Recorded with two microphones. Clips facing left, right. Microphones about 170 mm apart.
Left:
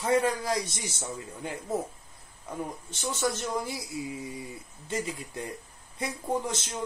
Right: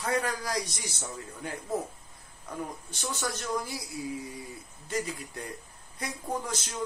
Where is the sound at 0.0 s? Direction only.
25° left (ahead or behind).